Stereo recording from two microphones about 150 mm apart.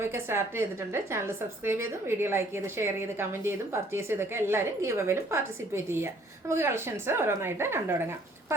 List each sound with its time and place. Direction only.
0.0 s a woman's voice: 15° right (ahead or behind)